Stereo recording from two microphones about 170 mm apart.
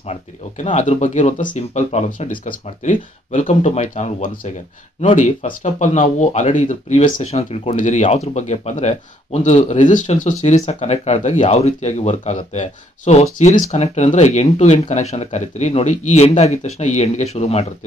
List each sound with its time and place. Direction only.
0.1 s speech: 45° left (ahead or behind)